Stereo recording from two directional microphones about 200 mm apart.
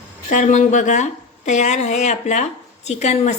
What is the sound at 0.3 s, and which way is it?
Speech, 40° left (ahead or behind).